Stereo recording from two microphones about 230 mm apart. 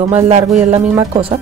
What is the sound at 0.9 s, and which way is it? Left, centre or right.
Speech, right.